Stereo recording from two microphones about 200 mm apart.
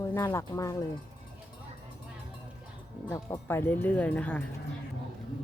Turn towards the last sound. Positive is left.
turn(degrees=5)  # may be behind; listen again after turning